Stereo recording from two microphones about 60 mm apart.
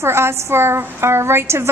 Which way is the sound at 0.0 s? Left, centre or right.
Right.